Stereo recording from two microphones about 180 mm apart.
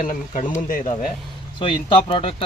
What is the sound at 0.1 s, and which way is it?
Speech, 45° left (ahead or behind).